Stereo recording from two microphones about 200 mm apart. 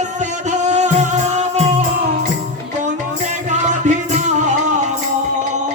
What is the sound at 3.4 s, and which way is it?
Music, 40° right (ahead or behind).